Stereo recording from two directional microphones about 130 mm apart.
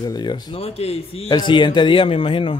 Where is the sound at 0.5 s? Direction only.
50° left (ahead or behind).